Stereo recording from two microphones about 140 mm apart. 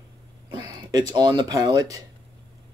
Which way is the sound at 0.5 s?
30° right (ahead or behind).